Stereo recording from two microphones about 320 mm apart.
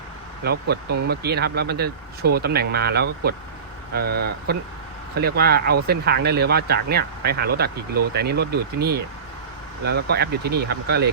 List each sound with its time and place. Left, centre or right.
0.7 s speech: right